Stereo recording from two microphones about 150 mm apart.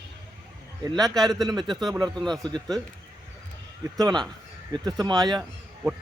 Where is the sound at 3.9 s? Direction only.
25° right (ahead or behind).